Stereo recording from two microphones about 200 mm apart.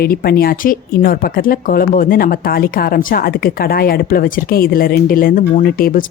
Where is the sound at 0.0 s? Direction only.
50° left (ahead or behind).